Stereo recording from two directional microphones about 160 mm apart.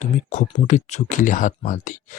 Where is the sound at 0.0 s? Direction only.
50° left (ahead or behind).